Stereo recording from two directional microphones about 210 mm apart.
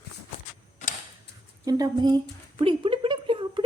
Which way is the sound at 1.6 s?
20° right (ahead or behind).